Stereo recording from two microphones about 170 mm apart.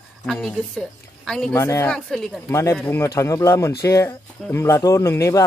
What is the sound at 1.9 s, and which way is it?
Speech, centre (ahead or behind).